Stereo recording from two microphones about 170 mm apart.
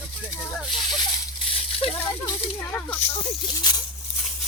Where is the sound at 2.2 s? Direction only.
15° left (ahead or behind).